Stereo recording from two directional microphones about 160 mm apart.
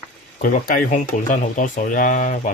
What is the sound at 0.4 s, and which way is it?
Speech, 60° left (ahead or behind).